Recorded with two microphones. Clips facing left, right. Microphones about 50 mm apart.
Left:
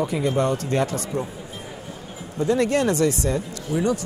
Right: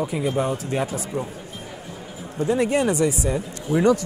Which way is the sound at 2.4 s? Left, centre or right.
Centre.